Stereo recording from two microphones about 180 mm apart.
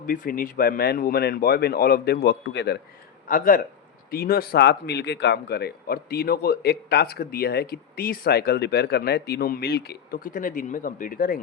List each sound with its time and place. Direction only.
0.1 s speech: 50° left (ahead or behind); by 2.7 s 70° left (ahead or behind)
3.2 s speech: 50° left (ahead or behind)